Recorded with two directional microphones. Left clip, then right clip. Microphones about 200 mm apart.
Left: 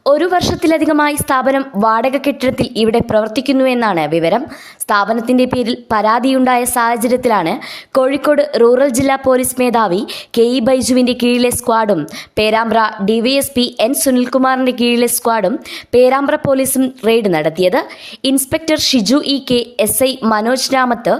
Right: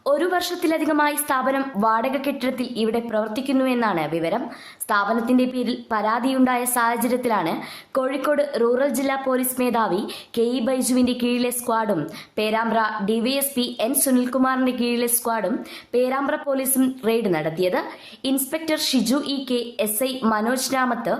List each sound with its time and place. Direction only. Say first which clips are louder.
0.0 s a woman's voice: left 9 dB; 35° left (ahead or behind)